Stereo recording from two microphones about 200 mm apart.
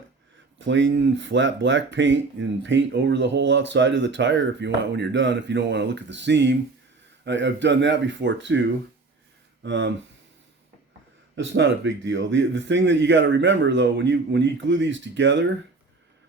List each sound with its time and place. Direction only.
0.6 s a man's voice: 65° right (ahead or behind)
9.6 s a man's voice: 65° right (ahead or behind)
11.3 s a man's voice: 65° right (ahead or behind)